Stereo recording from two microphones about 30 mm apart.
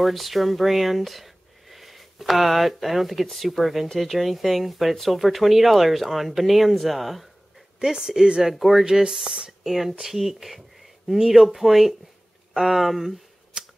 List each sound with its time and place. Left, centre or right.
0.0 s speech: centre
7.8 s speech: centre
13.5 s shuffling cards: right